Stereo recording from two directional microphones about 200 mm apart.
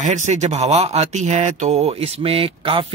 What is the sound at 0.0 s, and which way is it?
Speech, 35° right (ahead or behind).